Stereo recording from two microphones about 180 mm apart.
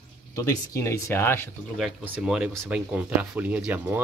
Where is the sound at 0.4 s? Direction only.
15° left (ahead or behind).